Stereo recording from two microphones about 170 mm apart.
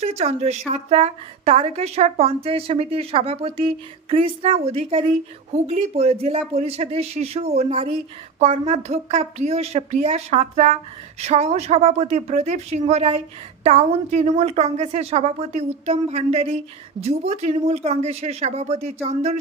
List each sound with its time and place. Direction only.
0.0 s a woman's voice: 40° right (ahead or behind)